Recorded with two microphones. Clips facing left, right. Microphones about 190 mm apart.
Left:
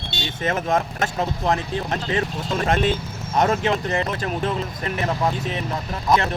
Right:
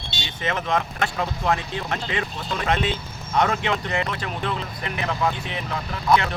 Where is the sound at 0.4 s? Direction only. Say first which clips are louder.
Left 3 dB; 45° left (ahead or behind).